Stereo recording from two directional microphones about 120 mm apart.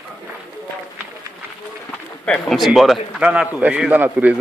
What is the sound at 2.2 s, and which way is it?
Speech, 10° left (ahead or behind).